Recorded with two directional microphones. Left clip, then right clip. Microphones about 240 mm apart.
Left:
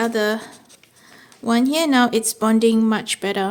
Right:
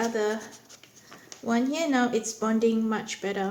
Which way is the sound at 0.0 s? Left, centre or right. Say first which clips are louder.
Left 7 dB; left.